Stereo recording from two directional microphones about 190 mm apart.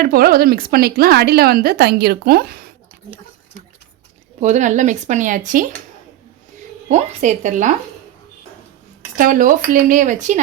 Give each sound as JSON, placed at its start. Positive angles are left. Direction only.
{"t": 0.0, "sound": "a woman's voice", "side_deg": -50}
{"t": 4.4, "sound": "speech", "side_deg": -40}
{"t": 6.8, "sound": "speech", "side_deg": -40}
{"t": 9.1, "sound": "a woman's voice", "side_deg": -45}